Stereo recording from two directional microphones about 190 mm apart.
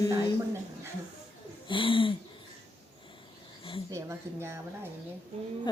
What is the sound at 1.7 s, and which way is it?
Speech, 25° left (ahead or behind).